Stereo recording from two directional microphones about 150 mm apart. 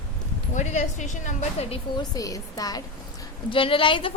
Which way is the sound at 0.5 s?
55° left (ahead or behind).